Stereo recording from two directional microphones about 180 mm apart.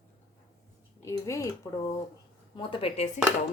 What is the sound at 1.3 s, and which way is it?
Dishes, 15° left (ahead or behind).